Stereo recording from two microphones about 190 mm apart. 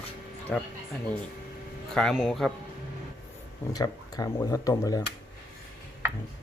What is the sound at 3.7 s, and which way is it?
Speech, 20° left (ahead or behind).